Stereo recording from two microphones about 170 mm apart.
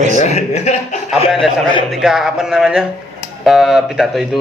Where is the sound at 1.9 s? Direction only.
Centre (ahead or behind).